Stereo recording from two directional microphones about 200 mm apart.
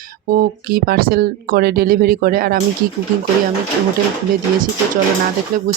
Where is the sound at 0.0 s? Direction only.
45° right (ahead or behind).